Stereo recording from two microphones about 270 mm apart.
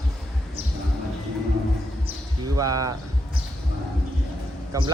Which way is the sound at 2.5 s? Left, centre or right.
Centre.